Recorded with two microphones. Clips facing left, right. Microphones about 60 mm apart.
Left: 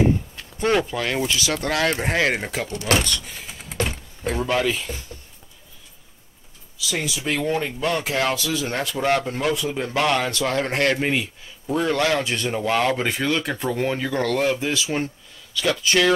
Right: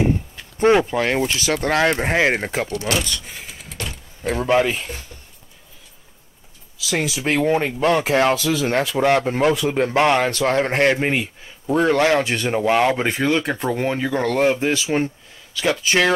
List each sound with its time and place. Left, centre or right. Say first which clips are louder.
0.6 s speech: right 5 dB; right
3.7 s vehicle: left 8 dB; left
4.4 s speech: right 4 dB; right
7.2 s speech: right 5 dB; right; by 14.3 s centre
14.3 s speech: right 6 dB; right